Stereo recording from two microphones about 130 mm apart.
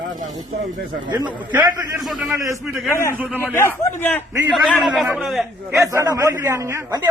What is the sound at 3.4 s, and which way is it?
Speech, 20° left (ahead or behind).